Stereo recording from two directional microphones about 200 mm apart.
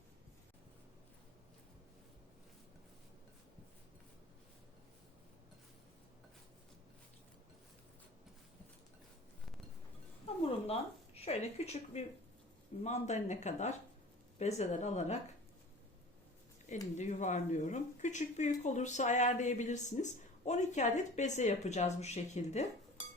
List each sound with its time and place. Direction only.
10.7 s a sound: 30° left (ahead or behind)
12.8 s a woman's voice: 35° left (ahead or behind)
17.0 s a woman's voice: 35° left (ahead or behind)